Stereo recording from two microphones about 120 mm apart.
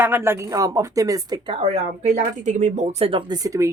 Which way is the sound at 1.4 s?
50° right (ahead or behind).